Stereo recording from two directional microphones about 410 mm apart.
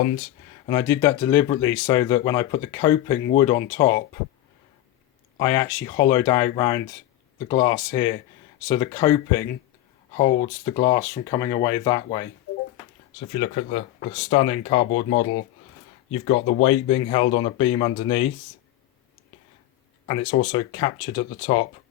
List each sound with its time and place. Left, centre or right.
0.7 s speech: centre
5.4 s speech: centre
10.2 s speech: centre
13.3 s speech: centre
20.1 s speech: centre